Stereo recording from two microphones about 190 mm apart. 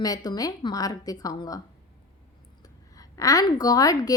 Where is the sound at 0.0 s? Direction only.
20° left (ahead or behind).